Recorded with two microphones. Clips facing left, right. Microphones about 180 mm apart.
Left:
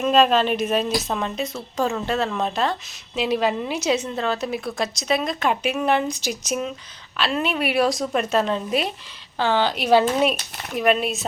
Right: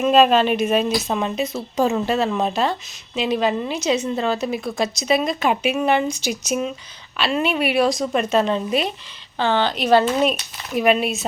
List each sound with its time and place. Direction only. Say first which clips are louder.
0.0 s a woman's voice: right 3 dB; 5° right (ahead or behind)